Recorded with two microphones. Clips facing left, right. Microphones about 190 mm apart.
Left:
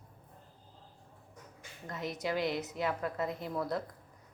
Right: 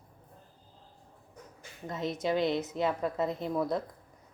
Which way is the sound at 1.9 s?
25° right (ahead or behind).